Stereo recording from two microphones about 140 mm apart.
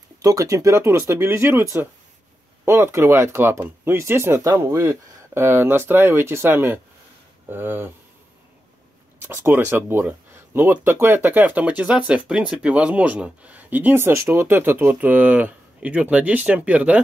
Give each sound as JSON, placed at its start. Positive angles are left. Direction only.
{"t": 0.2, "sound": "speech", "side_deg": -25}
{"t": 9.2, "sound": "speech", "side_deg": -15}